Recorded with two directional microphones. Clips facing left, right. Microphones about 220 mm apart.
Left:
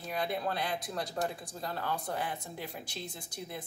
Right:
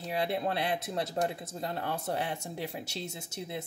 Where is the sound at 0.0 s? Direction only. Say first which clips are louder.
Right 3 dB; 25° right (ahead or behind).